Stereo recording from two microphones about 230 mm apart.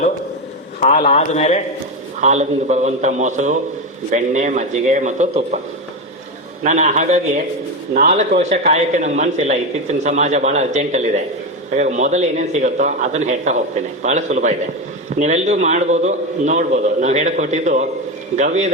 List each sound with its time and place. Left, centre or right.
0.9 s speech: left
2.2 s a man's voice: right
6.6 s a man's voice: right